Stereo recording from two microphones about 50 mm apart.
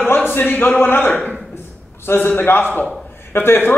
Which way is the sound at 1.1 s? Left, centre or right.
Left.